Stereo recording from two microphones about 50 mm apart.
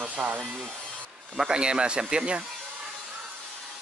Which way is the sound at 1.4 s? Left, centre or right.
Centre.